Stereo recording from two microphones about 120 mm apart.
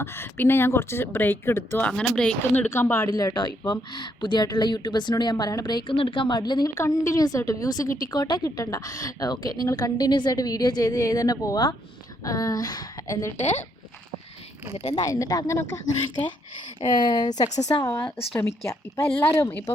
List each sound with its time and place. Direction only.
0.0 s speech: 20° left (ahead or behind)
1.9 s speech: 5° left (ahead or behind)
2.7 s speech: 20° left (ahead or behind)
3.1 s a woman's voice: 30° left (ahead or behind)
13.3 s speech: 70° left (ahead or behind)
14.8 s speech: 35° left (ahead or behind)
16.9 s a woman's voice: 35° left (ahead or behind)
18.3 s speech: 20° left (ahead or behind)